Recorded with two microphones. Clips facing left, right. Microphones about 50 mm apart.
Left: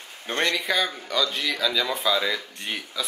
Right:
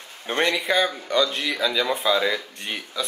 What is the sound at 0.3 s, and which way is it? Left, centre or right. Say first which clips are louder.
Speech: right 3 dB; centre.